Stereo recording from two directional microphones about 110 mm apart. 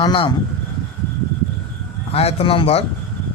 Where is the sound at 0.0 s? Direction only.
45° left (ahead or behind).